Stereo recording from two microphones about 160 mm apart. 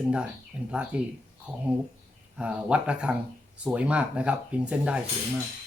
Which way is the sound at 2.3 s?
5° right (ahead or behind).